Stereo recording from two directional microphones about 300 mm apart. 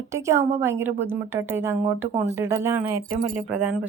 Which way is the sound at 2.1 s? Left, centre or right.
Right.